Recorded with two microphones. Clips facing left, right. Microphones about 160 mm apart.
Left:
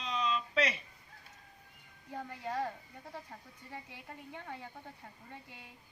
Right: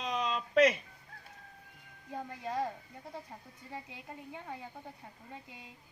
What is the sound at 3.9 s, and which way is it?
A woman's voice, 15° right (ahead or behind).